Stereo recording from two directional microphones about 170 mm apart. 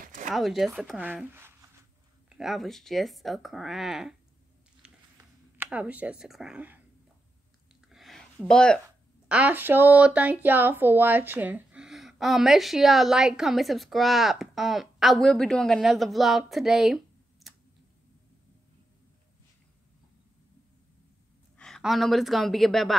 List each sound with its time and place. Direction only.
0.0 s a sound: 50° right (ahead or behind)
0.3 s speech: centre (ahead or behind)
2.2 s speech: 5° right (ahead or behind)
5.1 s speech: 10° right (ahead or behind)
7.9 s a sound: centre (ahead or behind)
9.3 s speech: 10° right (ahead or behind)
21.5 s a woman's voice: centre (ahead or behind)